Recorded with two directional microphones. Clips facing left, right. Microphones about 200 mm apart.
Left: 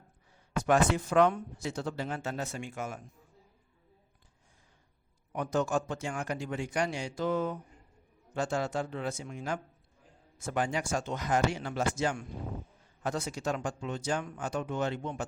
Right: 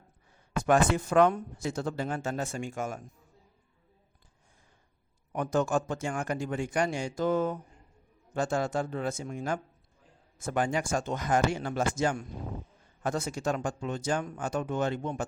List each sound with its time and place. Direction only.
0.5 s speech: 50° right (ahead or behind)
5.3 s speech: 50° right (ahead or behind)